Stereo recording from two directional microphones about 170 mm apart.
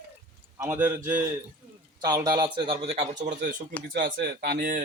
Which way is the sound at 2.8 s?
40° right (ahead or behind).